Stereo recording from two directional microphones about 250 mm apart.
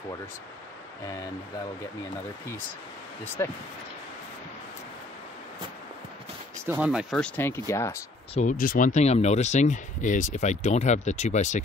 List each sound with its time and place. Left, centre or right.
3.4 s speech: centre
6.6 s speech: centre
8.4 s speech: left